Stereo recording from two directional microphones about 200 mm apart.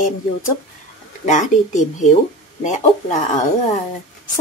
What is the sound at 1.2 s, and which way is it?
Speech, 40° left (ahead or behind).